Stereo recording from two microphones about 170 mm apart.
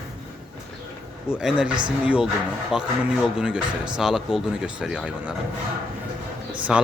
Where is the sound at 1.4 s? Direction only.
5° right (ahead or behind).